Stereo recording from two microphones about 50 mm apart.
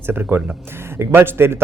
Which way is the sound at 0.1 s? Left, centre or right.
Right.